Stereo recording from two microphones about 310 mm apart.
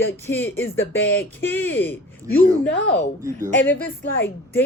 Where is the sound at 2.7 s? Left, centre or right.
Left.